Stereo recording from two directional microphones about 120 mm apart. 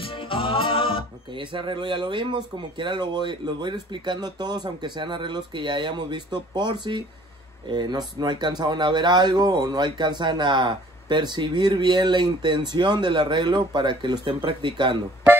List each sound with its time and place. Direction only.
0.0 s music: 50° left (ahead or behind)
1.3 s speech: 45° right (ahead or behind)